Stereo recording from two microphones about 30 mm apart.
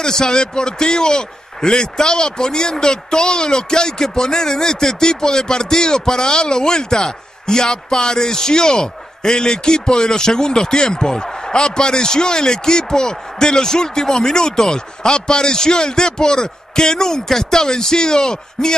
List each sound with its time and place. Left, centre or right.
0.0 s speech: left